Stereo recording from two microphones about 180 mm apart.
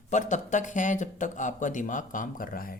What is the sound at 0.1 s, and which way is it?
A woman's voice, 40° left (ahead or behind).